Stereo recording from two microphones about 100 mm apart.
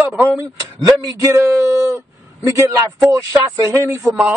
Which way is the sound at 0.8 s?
40° right (ahead or behind).